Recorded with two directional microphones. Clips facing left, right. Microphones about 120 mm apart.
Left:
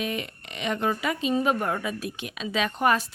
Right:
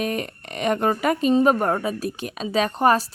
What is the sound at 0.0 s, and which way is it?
A woman's voice, 45° right (ahead or behind).